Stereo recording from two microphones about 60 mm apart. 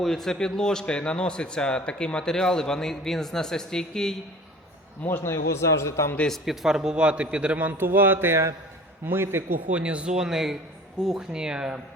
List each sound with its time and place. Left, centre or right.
0.0 s a man's voice: centre
5.0 s a man's voice: left
6.3 s a man's voice: centre; by 9.6 s right
9.7 s a man's voice: centre